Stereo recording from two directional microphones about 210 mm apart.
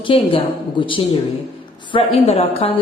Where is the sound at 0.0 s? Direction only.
25° left (ahead or behind).